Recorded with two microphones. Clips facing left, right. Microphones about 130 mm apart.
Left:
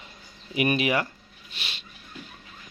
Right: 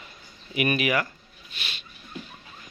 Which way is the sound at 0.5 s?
25° left (ahead or behind).